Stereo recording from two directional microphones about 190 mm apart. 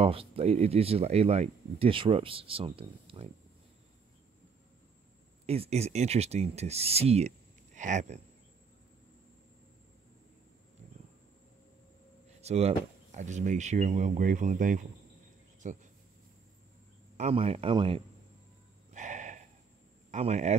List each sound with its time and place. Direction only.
0.0 s speech: 30° right (ahead or behind)
5.5 s speech: 35° right (ahead or behind)
12.4 s speech: 35° right (ahead or behind)
15.6 s cricket: 40° right (ahead or behind)
17.2 s speech: 30° right (ahead or behind)
18.9 s a sound: 40° right (ahead or behind)
20.1 s a man's voice: 35° right (ahead or behind)